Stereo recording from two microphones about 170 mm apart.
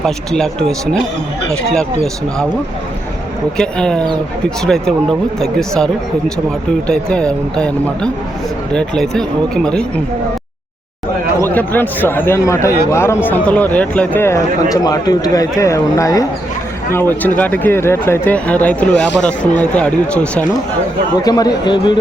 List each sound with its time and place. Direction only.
0.0 s speech: centre (ahead or behind)
3.6 s speech: 5° left (ahead or behind)
11.3 s speech: 10° left (ahead or behind)
21.2 s a man's voice: 20° left (ahead or behind)